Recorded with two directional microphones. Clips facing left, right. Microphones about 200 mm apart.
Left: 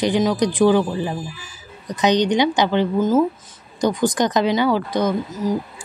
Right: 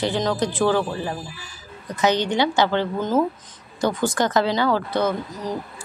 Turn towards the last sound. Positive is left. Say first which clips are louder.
# left 6 dB
turn(degrees=15)  # may be behind; listen again after turning